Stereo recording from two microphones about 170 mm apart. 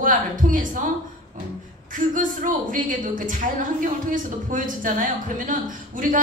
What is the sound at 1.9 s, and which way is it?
A woman's voice, 50° right (ahead or behind).